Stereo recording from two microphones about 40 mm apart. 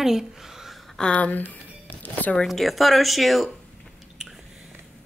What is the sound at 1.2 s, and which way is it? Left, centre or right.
Speech, left.